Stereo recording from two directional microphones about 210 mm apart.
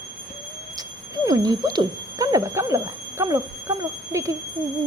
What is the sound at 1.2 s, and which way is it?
Speech, 15° right (ahead or behind).